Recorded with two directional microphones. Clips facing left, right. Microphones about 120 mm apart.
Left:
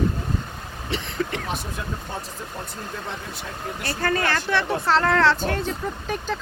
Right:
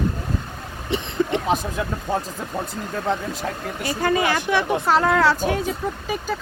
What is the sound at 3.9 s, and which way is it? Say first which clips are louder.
Speech: right 3 dB; 15° right (ahead or behind).